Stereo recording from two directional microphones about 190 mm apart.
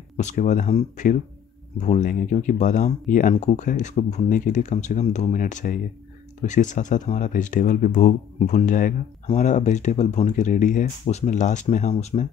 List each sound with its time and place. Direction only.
0.2 s speech: 40° left (ahead or behind)